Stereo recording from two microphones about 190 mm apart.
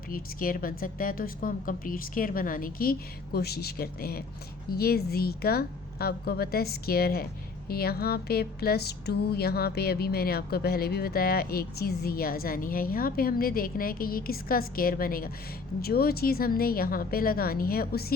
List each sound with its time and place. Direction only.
0.1 s a woman's voice: 50° left (ahead or behind)